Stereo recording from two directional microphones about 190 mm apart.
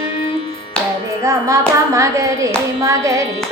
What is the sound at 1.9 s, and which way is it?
Music, 15° right (ahead or behind).